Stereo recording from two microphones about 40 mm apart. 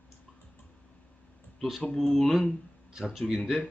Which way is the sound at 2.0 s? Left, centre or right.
Centre.